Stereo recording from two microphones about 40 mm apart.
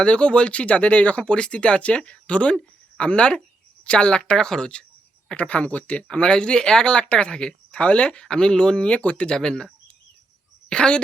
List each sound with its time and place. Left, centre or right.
0.0 s speech: left
1.2 s speech: left
5.4 s speech: left
6.1 s speech: left
8.9 s speech: left; by 9.6 s centre
10.7 s speech: left